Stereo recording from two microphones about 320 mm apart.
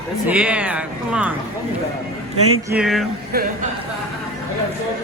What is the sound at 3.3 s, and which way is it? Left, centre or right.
Speech, right.